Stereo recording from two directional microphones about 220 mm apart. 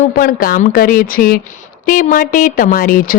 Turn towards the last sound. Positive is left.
turn(degrees=40)  # may be behind; listen again after turning